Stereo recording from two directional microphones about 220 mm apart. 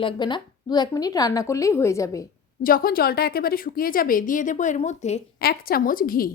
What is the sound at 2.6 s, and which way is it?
A woman's voice, 40° left (ahead or behind).